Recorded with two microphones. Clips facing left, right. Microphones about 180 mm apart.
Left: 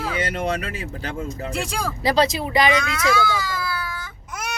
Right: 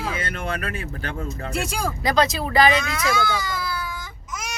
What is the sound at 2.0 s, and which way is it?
Speech, 25° left (ahead or behind).